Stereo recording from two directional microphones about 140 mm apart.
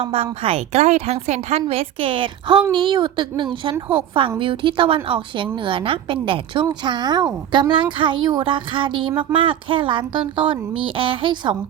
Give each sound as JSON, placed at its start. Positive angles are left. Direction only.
{"t": 0.0, "sound": "speech", "side_deg": -45}